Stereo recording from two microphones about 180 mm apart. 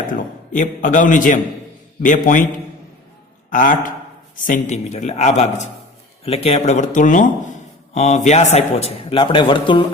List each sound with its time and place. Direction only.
0.1 s a man's voice: 45° left (ahead or behind)
3.5 s a man's voice: 50° left (ahead or behind); by 9.8 s 25° left (ahead or behind)